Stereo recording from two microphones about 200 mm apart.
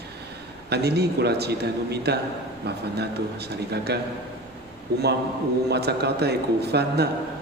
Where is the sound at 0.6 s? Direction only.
55° right (ahead or behind).